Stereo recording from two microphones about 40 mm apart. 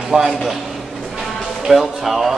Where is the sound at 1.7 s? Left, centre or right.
Centre.